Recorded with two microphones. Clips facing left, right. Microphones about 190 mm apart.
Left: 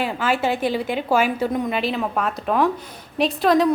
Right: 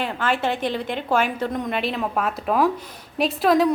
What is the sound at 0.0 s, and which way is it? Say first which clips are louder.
A woman's voice: left 2 dB; 5° left (ahead or behind).